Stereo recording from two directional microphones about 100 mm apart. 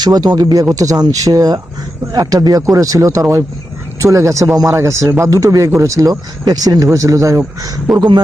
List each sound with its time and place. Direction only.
0.0 s speech: 40° right (ahead or behind)
7.9 s speech: 50° right (ahead or behind)